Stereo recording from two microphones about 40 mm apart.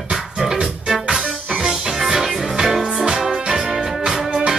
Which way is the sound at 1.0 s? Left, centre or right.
Right.